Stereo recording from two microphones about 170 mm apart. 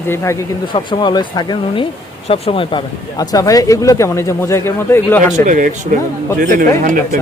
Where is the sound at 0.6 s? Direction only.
30° left (ahead or behind).